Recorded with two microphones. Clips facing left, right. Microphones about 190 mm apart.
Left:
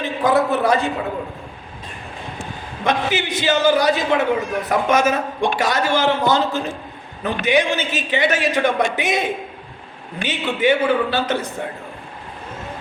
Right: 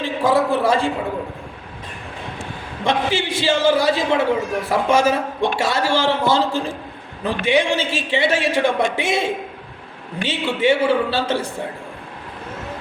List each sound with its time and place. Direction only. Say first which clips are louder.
0.3 s a man's voice: even; 25° right (ahead or behind)
2.8 s a man's voice: even; 30° right (ahead or behind)